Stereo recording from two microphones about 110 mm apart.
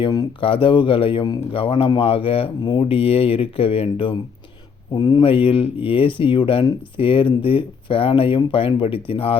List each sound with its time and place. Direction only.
0.4 s speech: 50° left (ahead or behind)
4.9 s speech: 40° left (ahead or behind)
5.2 s speech: 55° left (ahead or behind)